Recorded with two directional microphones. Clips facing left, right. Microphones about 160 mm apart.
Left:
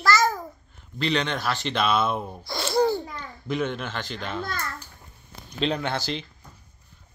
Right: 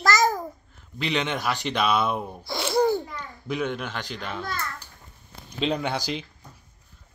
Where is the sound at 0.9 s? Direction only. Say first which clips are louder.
Left 1 dB; 15° right (ahead or behind).